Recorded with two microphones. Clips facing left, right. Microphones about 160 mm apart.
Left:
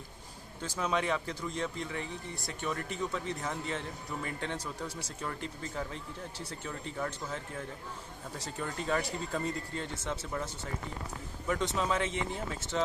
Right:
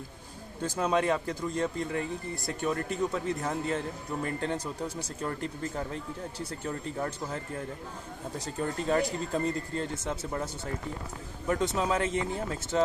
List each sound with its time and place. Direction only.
0.6 s a man's voice: 40° right (ahead or behind)
8.5 s a man's voice: 35° right (ahead or behind)
11.4 s a man's voice: 40° right (ahead or behind)